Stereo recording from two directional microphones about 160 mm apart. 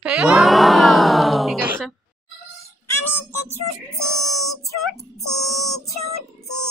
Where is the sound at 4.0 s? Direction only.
5° left (ahead or behind).